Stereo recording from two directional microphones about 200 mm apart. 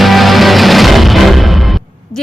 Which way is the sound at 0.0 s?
Centre (ahead or behind).